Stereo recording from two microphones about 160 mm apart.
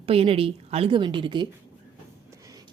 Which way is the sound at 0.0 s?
35° right (ahead or behind).